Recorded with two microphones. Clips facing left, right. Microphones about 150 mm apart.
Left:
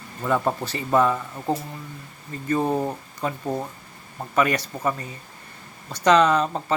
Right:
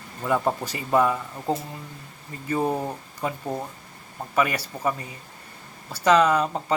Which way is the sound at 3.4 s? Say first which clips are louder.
Left 3 dB; 5° left (ahead or behind).